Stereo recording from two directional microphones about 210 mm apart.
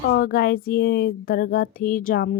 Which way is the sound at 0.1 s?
50° left (ahead or behind).